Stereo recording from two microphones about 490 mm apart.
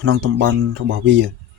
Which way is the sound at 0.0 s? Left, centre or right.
Right.